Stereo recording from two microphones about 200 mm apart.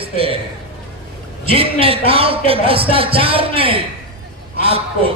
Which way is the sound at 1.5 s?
30° right (ahead or behind).